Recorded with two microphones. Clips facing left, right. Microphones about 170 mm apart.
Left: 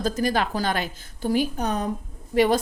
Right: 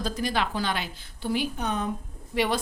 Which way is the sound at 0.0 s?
45° left (ahead or behind).